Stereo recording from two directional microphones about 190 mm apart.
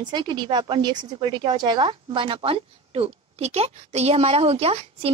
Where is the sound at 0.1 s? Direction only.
25° right (ahead or behind).